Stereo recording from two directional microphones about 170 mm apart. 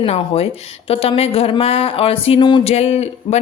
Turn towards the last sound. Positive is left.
turn(degrees=40)  # may be behind; listen again after turning